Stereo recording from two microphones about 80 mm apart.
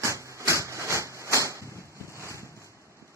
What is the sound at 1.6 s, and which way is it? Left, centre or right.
Wind noise, left.